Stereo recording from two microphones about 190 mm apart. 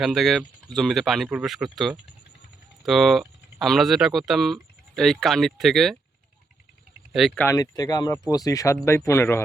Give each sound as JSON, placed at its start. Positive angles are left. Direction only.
{"t": 0.0, "sound": "speech", "side_deg": 0}
{"t": 7.1, "sound": "speech", "side_deg": 0}
{"t": 7.4, "sound": "speech", "side_deg": 20}